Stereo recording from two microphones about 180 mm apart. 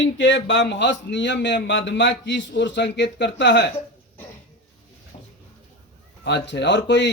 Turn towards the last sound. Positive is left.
turn(degrees=75)  # may be behind; listen again after turning